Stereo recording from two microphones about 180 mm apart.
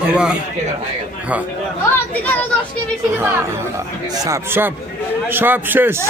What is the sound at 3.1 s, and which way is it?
A man's voice, 15° right (ahead or behind).